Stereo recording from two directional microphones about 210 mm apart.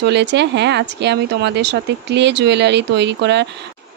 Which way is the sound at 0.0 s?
55° right (ahead or behind).